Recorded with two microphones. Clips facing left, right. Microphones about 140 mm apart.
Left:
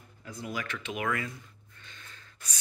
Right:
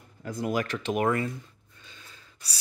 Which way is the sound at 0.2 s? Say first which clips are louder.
Right 9 dB; 45° right (ahead or behind).